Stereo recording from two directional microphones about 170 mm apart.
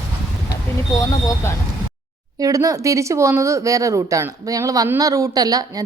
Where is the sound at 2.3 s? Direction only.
20° right (ahead or behind).